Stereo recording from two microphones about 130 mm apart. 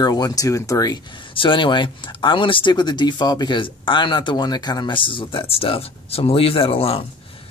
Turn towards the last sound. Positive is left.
turn(degrees=50)  # may be behind; listen again after turning